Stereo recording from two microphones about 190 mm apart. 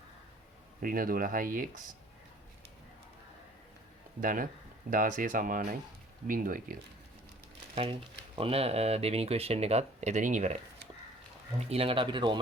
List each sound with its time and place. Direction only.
0.8 s speech: 50° right (ahead or behind)
4.2 s speech: 45° right (ahead or behind)
8.4 s speech: 30° right (ahead or behind)
11.7 s speech: 30° right (ahead or behind)